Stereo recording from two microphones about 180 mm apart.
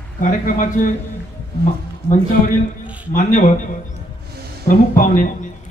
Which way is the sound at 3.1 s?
45° left (ahead or behind).